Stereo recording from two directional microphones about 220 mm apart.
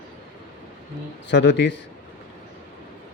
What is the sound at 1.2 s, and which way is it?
Speech, 55° left (ahead or behind).